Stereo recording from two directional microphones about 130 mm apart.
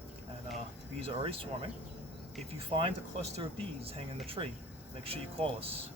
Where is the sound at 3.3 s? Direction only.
45° right (ahead or behind).